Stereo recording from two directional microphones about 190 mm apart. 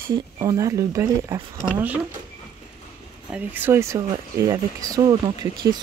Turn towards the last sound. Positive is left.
turn(degrees=-20)  # may be behind; listen again after turning